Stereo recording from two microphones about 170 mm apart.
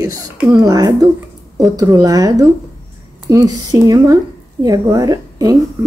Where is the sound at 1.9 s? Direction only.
20° right (ahead or behind).